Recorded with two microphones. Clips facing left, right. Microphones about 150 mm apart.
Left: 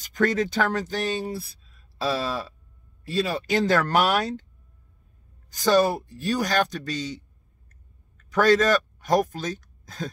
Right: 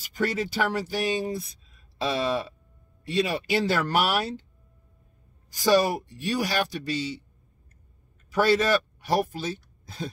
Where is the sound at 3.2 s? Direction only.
10° right (ahead or behind).